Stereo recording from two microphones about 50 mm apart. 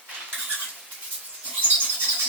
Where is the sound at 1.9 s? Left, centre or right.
Right.